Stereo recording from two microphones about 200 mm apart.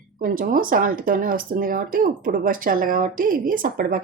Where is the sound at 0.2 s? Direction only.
45° right (ahead or behind).